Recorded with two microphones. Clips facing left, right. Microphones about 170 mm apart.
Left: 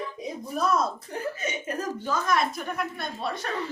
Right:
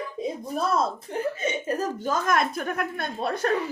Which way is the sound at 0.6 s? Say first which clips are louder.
Even; 30° right (ahead or behind).